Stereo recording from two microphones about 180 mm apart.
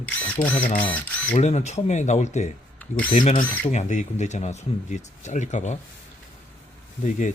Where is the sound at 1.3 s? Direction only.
40° left (ahead or behind).